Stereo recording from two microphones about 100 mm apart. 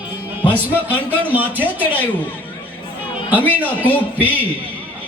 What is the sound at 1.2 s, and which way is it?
Speech, 20° right (ahead or behind).